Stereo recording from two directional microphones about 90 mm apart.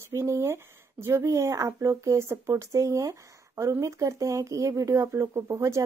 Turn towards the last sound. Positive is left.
turn(degrees=-35)  # may be behind; listen again after turning